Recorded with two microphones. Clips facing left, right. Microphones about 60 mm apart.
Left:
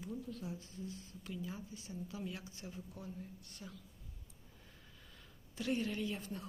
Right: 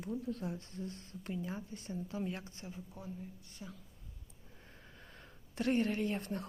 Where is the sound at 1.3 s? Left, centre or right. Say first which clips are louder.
Right 4 dB; right.